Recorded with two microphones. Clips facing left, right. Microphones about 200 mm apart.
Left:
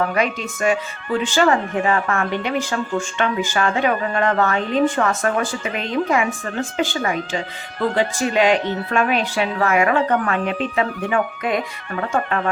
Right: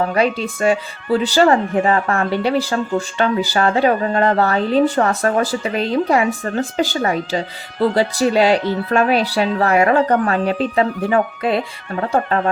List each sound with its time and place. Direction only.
0.1 s speech: 30° right (ahead or behind)